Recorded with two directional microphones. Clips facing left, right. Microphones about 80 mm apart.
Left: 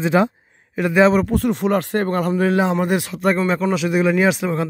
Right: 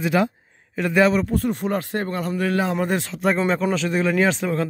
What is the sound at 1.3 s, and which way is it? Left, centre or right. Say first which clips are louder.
Speech: left 4 dB; left.